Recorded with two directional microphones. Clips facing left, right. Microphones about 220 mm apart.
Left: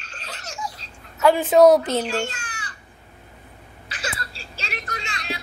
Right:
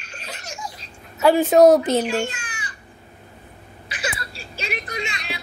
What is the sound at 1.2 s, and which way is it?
Speech, 35° right (ahead or behind).